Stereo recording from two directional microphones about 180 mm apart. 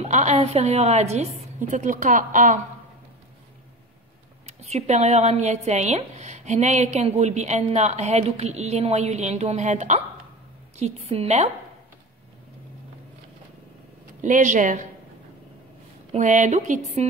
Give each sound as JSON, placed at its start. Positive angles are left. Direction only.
{"t": 0.0, "sound": "speech", "side_deg": -40}
{"t": 4.5, "sound": "speech", "side_deg": -35}
{"t": 14.2, "sound": "speech", "side_deg": -45}
{"t": 16.1, "sound": "speech", "side_deg": -45}